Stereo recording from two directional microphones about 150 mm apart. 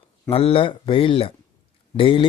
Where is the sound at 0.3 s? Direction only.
40° left (ahead or behind).